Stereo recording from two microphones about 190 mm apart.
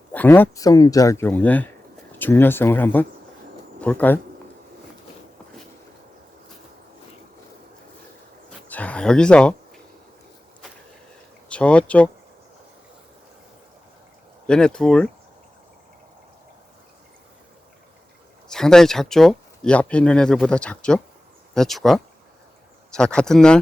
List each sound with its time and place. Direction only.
0.1 s speech: 10° left (ahead or behind)
8.7 s a sound: 5° left (ahead or behind)
11.4 s speech: 5° left (ahead or behind)
14.4 s speech: 5° left (ahead or behind)
18.4 s speech: 5° left (ahead or behind)